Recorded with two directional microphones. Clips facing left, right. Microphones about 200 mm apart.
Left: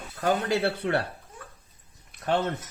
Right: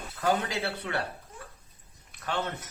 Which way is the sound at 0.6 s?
55° left (ahead or behind).